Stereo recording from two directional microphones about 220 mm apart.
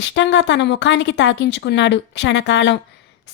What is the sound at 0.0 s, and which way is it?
Speech, 55° left (ahead or behind).